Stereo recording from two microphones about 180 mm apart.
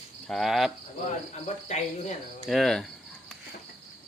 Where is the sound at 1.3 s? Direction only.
40° left (ahead or behind).